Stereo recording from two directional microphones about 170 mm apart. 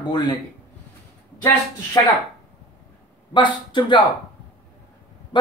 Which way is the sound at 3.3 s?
25° left (ahead or behind).